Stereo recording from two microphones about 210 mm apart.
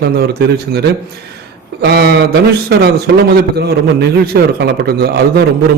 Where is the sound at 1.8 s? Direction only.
50° right (ahead or behind).